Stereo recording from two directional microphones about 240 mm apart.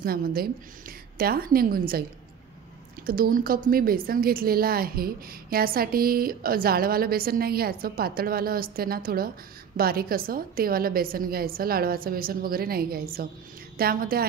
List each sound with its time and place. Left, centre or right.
0.0 s a woman's voice: right
3.1 s a woman's voice: right